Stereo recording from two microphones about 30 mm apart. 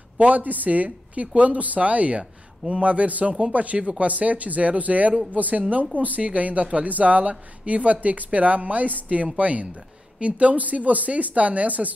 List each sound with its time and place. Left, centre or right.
0.4 s a woman's voice: right
9.4 s a woman's voice: right